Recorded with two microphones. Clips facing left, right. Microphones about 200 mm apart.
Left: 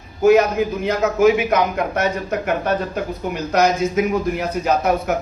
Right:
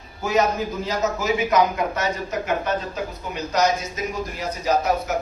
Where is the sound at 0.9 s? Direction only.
60° left (ahead or behind).